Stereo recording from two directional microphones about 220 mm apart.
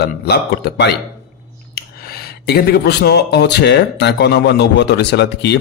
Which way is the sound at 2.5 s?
45° left (ahead or behind).